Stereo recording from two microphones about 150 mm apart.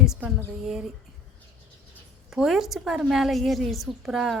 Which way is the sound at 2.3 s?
Centre (ahead or behind).